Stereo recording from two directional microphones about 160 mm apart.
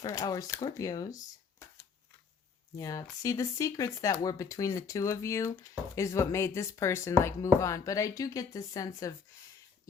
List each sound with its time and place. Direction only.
0.0 s speech: 25° left (ahead or behind)